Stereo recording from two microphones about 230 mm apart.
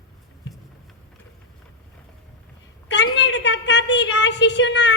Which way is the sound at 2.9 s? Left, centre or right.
Left.